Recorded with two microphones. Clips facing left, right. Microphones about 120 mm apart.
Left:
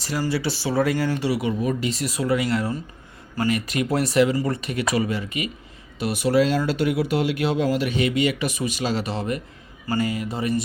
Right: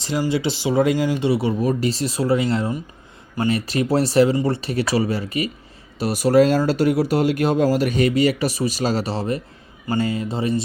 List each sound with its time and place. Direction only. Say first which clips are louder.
0.0 s speech: right 3 dB; 20° right (ahead or behind)
1.3 s speech: right 4 dB; 30° right (ahead or behind)